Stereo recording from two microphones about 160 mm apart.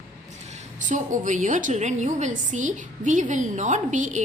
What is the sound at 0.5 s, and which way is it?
A woman's voice, 55° right (ahead or behind).